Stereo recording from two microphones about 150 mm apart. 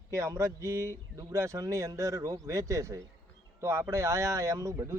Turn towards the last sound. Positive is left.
turn(degrees=-20)  # may be behind; listen again after turning